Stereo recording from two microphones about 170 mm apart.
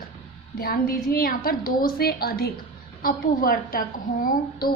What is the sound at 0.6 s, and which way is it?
A woman's voice, 60° left (ahead or behind).